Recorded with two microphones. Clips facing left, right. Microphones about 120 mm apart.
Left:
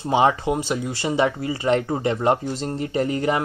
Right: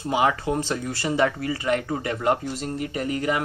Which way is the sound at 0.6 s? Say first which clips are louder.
Left 2 dB; 15° left (ahead or behind).